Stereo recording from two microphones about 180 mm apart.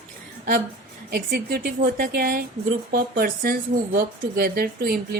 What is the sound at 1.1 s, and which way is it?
A woman's voice, 60° right (ahead or behind).